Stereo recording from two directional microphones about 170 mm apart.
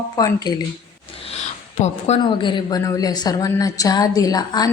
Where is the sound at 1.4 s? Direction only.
40° left (ahead or behind).